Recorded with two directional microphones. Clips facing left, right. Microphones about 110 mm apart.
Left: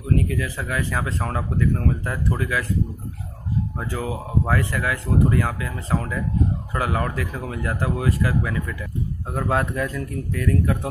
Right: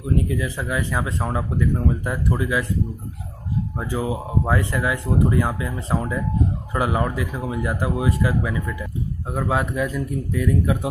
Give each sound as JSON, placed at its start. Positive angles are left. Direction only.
{"t": 0.0, "sound": "speech", "side_deg": -20}
{"t": 3.8, "sound": "speech", "side_deg": -15}
{"t": 9.3, "sound": "speech", "side_deg": -5}